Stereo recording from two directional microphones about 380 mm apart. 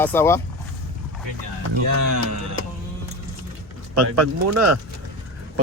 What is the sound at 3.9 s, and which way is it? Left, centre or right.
Speech, right.